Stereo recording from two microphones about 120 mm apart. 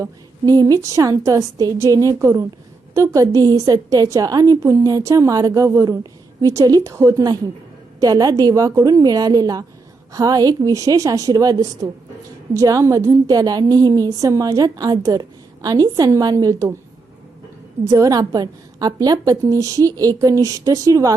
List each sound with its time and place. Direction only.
0.0 s a woman's voice: 30° right (ahead or behind)
17.8 s a woman's voice: 30° right (ahead or behind)